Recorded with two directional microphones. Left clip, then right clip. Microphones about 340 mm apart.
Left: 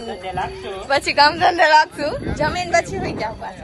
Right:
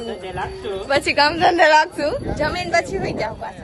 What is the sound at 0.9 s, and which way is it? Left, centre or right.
A woman's voice, centre.